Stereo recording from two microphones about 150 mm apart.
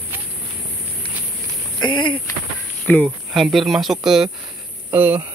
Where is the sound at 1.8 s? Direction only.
30° left (ahead or behind).